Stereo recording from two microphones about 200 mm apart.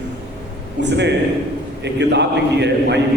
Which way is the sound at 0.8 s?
60° right (ahead or behind).